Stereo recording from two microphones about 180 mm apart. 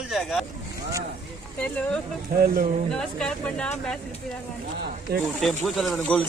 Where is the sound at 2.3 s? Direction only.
55° right (ahead or behind).